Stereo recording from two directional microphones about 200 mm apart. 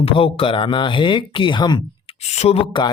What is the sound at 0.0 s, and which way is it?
Speech, 30° left (ahead or behind).